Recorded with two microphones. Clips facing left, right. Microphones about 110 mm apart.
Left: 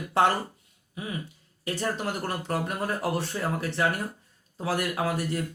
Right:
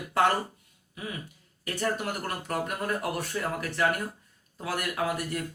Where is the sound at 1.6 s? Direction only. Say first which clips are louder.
Left 1 dB; 25° left (ahead or behind).